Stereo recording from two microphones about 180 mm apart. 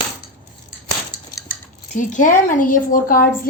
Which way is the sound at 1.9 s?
45° left (ahead or behind).